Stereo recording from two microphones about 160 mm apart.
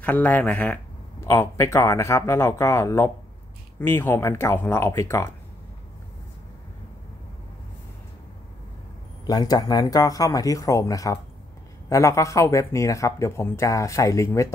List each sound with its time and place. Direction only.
0.0 s speech: 10° left (ahead or behind)
9.2 s speech: 25° left (ahead or behind)